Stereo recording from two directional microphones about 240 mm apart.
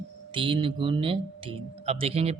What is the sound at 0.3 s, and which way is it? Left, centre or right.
Speech, right.